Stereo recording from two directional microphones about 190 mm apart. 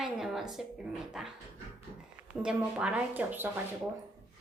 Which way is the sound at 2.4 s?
5° right (ahead or behind).